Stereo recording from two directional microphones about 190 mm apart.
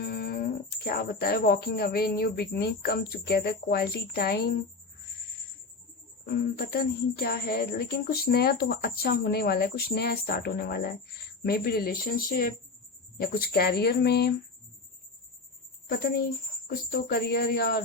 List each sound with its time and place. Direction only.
0.0 s a sound: 55° left (ahead or behind)
0.9 s a woman's voice: 55° left (ahead or behind)
6.2 s a woman's voice: 50° left (ahead or behind)
15.9 s speech: 50° left (ahead or behind)